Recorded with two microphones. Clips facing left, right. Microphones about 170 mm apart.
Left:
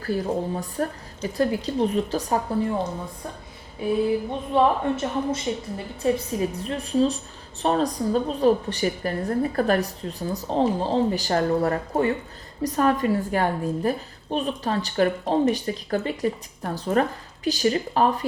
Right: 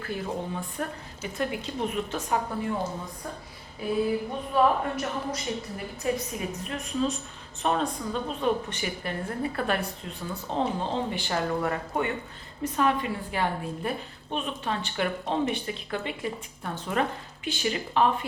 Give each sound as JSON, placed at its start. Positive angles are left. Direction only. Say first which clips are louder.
{"t": 0.0, "sound": "a woman's voice", "louder": "left 7 dB", "side_deg": 35}
{"t": 4.3, "sound": "a woman's voice", "louder": "left 3 dB", "side_deg": 25}